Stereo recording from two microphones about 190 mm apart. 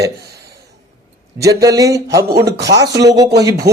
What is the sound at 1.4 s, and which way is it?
A man's voice, 20° right (ahead or behind).